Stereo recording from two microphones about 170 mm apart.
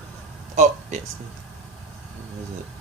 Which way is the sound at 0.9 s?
45° right (ahead or behind).